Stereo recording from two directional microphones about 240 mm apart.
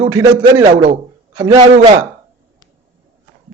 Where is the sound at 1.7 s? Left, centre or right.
Right.